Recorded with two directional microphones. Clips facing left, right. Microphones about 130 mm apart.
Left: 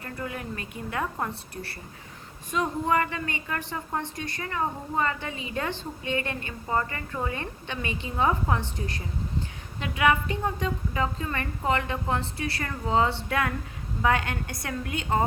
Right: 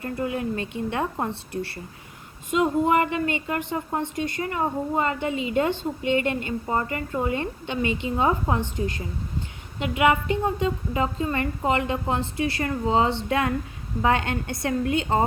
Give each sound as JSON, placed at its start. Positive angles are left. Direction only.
{"t": 0.0, "sound": "a woman's voice", "side_deg": -25}
{"t": 9.8, "sound": "a woman's voice", "side_deg": -20}